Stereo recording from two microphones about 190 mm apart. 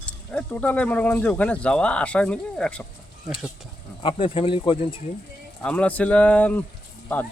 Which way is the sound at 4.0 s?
30° left (ahead or behind).